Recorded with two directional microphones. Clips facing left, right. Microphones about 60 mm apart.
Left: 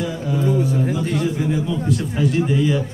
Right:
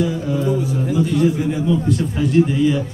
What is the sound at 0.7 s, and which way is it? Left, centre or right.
Music, left.